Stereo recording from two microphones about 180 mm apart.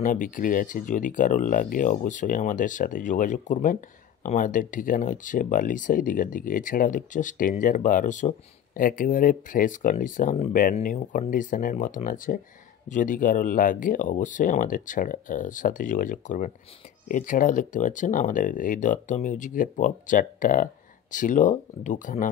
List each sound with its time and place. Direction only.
0.0 s speech: 50° left (ahead or behind)